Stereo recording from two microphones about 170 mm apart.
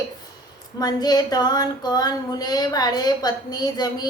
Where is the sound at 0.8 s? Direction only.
25° left (ahead or behind).